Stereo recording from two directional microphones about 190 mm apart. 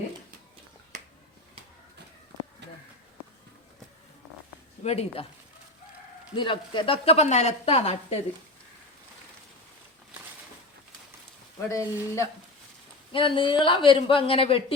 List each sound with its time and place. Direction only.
2.6 s a sound: 65° right (ahead or behind)
4.8 s speech: 35° left (ahead or behind)
6.3 s a woman's voice: 25° left (ahead or behind)
11.7 s speech: 15° left (ahead or behind)
13.1 s a man's voice: 25° left (ahead or behind)